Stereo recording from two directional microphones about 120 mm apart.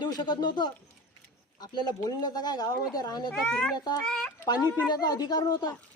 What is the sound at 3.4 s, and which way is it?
Speech, 5° left (ahead or behind).